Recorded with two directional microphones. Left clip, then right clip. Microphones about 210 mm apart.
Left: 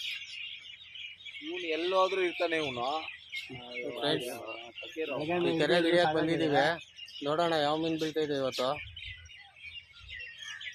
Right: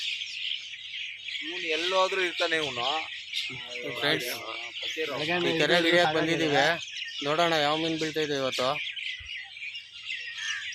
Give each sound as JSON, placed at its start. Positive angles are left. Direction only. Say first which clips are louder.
{"t": 1.6, "sound": "a man's voice", "louder": "right 2 dB", "side_deg": -10}